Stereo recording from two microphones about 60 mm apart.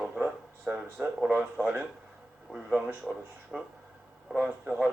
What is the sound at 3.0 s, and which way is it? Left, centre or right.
A man's voice, centre.